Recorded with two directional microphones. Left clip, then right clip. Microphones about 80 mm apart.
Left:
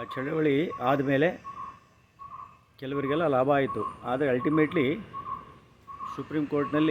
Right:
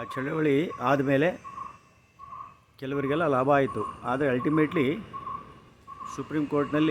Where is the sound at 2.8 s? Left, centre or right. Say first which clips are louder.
Even; right.